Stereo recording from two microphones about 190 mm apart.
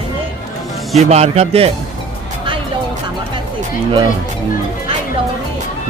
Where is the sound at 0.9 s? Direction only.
35° right (ahead or behind).